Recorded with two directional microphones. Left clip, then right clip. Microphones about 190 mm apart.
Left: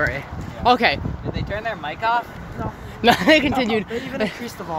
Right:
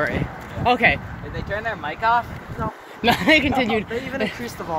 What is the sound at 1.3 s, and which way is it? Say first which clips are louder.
Speech: right 1 dB; 5° left (ahead or behind).